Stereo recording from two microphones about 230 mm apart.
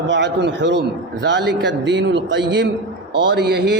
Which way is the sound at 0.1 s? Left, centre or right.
Right.